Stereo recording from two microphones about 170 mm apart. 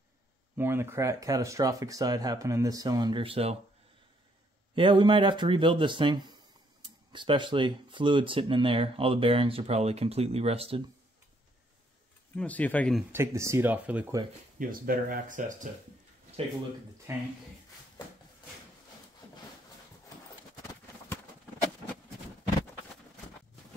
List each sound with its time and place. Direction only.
0.6 s speech: 15° right (ahead or behind); by 3.5 s 35° right (ahead or behind)
4.7 s speech: 30° right (ahead or behind)
12.4 s speech: 10° left (ahead or behind)
13.1 s speech: 15° right (ahead or behind)
14.6 s speech: 55° right (ahead or behind)
17.1 s speech: 15° right (ahead or behind)